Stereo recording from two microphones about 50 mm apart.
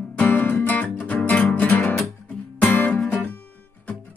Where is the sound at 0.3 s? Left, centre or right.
Left.